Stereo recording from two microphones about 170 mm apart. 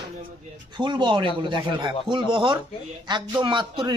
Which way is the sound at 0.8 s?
25° right (ahead or behind).